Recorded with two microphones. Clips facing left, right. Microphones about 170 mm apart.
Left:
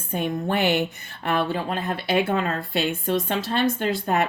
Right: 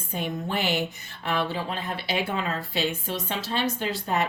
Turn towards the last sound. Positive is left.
turn(degrees=55)  # may be behind; listen again after turning